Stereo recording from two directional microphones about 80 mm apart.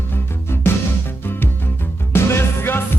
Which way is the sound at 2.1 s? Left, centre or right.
Left.